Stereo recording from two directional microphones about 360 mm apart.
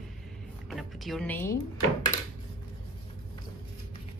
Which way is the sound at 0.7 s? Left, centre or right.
Centre.